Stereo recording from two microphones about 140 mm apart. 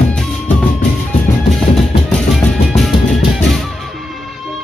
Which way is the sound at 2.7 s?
Centre (ahead or behind).